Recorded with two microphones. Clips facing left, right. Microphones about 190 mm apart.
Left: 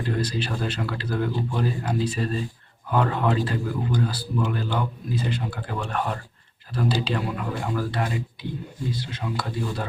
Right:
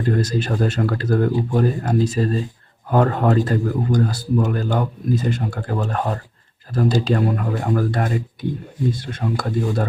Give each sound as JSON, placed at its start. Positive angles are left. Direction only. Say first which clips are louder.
{"t": 0.0, "sound": "speech", "louder": "right 6 dB", "side_deg": -45}